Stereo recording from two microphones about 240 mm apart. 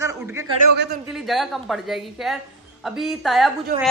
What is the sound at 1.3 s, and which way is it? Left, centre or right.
A woman's voice, centre.